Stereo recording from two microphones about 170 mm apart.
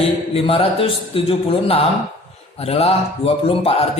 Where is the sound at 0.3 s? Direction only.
35° left (ahead or behind).